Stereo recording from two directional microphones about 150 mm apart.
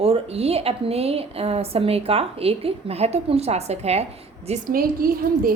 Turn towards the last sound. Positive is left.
turn(degrees=-75)  # may be behind; listen again after turning